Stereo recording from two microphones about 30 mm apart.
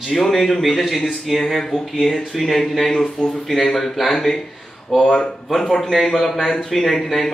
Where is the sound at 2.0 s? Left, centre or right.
Centre.